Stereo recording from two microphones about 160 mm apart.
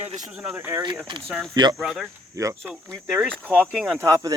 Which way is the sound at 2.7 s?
15° right (ahead or behind).